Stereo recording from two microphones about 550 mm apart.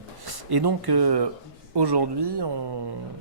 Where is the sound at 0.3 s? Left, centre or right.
Right.